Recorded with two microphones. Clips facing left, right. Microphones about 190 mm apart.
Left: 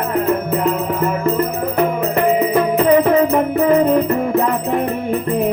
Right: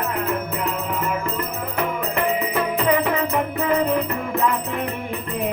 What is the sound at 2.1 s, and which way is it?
Music, 40° left (ahead or behind).